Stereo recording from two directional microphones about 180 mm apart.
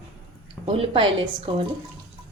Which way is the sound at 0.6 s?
30° right (ahead or behind).